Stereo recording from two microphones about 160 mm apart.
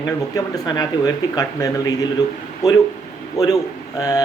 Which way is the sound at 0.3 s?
25° left (ahead or behind).